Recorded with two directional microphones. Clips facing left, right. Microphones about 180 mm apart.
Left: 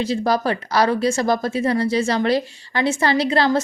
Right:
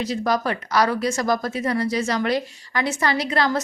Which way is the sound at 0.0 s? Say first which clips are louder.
Left 3 dB; 30° left (ahead or behind).